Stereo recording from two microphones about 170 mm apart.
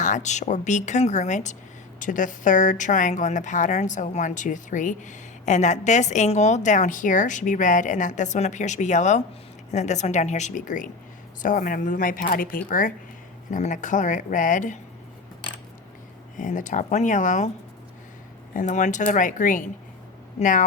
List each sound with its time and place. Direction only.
0.0 s speech: 45° left (ahead or behind)
16.4 s speech: 45° left (ahead or behind)
18.5 s speech: 45° left (ahead or behind)